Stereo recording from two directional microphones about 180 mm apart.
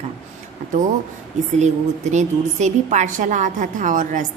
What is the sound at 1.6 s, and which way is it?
A woman's voice, 40° right (ahead or behind).